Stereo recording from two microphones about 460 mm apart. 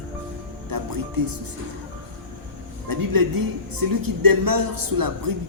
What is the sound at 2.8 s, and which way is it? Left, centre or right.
A woman's voice, right.